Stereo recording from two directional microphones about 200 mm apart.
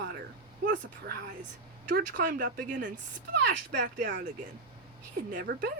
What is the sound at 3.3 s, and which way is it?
Speech, 60° right (ahead or behind).